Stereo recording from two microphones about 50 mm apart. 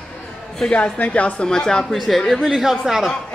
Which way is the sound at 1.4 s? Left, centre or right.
Centre.